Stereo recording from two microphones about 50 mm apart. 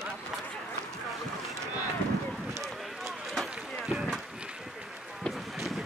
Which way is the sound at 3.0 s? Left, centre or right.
Centre.